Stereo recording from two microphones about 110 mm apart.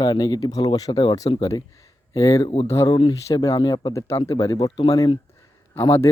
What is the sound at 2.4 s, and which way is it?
Speech, 55° left (ahead or behind).